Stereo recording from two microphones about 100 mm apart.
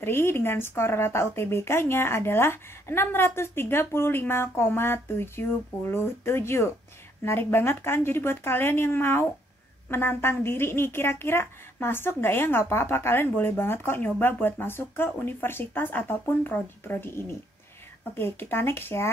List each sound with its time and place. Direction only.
0.0 s a woman's voice: 25° left (ahead or behind)